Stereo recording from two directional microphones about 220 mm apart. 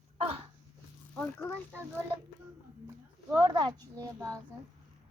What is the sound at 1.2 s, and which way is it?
Speech, 10° left (ahead or behind).